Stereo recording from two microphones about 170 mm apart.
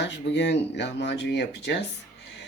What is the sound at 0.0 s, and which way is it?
Speech, 90° left.